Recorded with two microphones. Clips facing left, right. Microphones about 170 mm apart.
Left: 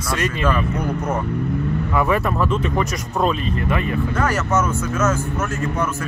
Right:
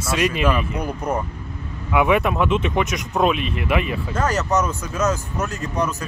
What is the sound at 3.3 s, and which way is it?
Speech, 90° right.